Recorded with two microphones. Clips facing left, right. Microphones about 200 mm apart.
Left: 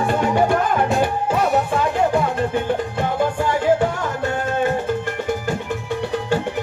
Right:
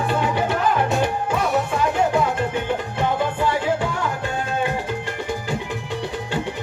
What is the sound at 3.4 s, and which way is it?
Music, 45° left (ahead or behind).